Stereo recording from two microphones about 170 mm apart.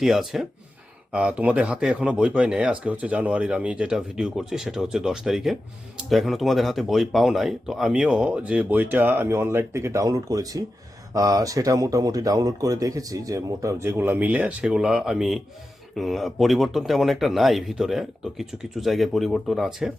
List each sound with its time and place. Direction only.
0.0 s speech: centre (ahead or behind)